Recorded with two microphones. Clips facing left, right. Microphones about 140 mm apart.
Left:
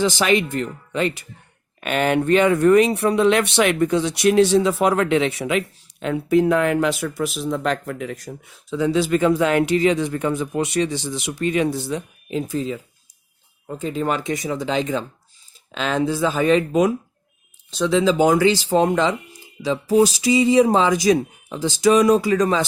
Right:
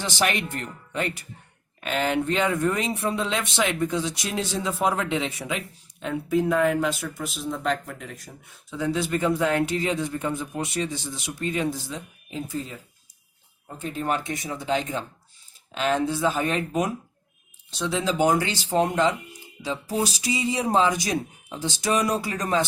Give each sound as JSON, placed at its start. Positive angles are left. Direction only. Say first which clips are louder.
{"t": 0.9, "sound": "speech", "louder": "left 6 dB", "side_deg": 90}
{"t": 1.8, "sound": "speech", "louder": "left 5 dB", "side_deg": 70}
{"t": 13.7, "sound": "speech", "louder": "left 4 dB", "side_deg": 90}
{"t": 17.9, "sound": "speech", "louder": "left 6 dB", "side_deg": 90}
{"t": 20.2, "sound": "speech", "louder": "left 11 dB", "side_deg": 90}